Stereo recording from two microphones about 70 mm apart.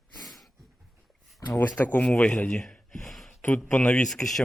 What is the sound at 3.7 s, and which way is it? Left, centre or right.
Speech, centre.